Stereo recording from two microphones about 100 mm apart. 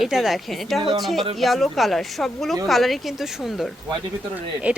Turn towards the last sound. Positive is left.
turn(degrees=-15)  # may be behind; listen again after turning